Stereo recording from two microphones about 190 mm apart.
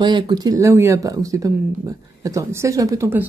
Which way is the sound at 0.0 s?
20° right (ahead or behind).